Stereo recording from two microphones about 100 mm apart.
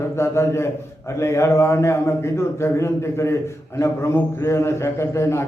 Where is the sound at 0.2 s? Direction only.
25° left (ahead or behind).